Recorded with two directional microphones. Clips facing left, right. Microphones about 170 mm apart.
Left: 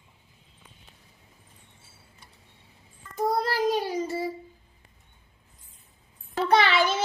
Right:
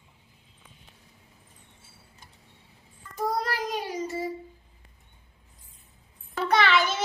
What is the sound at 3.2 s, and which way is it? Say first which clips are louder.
Child singing: left 4 dB; 30° left (ahead or behind).